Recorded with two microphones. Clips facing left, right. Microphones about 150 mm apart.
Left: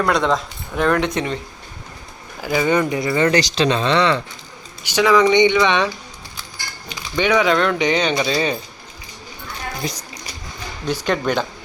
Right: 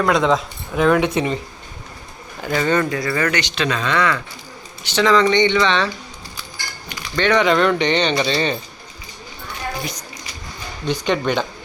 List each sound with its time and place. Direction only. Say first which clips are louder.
0.0 s speech: right 2 dB; centre (ahead or behind)
2.4 s speech: left 1 dB; 10° left (ahead or behind); by 4.2 s 30° left (ahead or behind)
4.8 s speech: left 1 dB; 10° left (ahead or behind)
7.2 s speech: right 1 dB; 5° left (ahead or behind)
10.8 s speech: right 1 dB; 5° left (ahead or behind)